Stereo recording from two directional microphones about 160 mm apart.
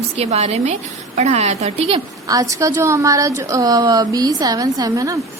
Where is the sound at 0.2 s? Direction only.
40° right (ahead or behind).